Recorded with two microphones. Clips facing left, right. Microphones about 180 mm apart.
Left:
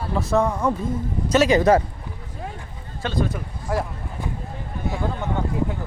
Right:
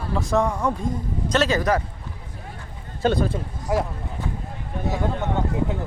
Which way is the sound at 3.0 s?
40° right (ahead or behind).